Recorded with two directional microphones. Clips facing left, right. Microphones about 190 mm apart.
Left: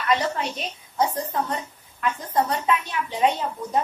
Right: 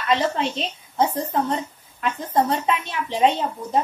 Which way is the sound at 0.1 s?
25° right (ahead or behind).